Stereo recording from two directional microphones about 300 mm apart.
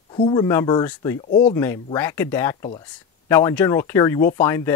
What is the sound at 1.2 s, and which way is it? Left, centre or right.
Speech, left.